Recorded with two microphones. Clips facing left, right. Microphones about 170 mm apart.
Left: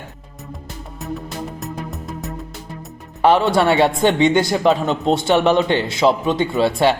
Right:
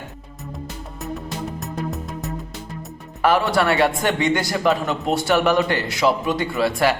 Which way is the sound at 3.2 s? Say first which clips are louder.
Left 4 dB; 25° left (ahead or behind).